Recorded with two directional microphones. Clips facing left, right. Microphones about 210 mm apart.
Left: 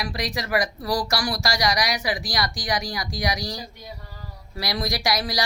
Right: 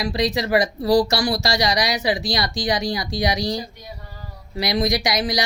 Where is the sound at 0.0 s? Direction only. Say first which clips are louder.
Right 7 dB; 25° right (ahead or behind).